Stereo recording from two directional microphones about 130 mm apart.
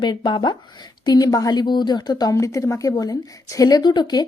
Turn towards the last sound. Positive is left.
turn(degrees=35)  # may be behind; listen again after turning